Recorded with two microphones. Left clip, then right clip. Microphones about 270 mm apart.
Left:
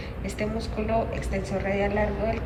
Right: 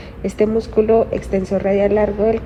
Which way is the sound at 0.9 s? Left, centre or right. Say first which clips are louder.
Right 12 dB; right.